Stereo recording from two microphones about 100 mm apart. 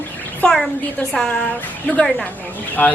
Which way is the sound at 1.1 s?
5° left (ahead or behind).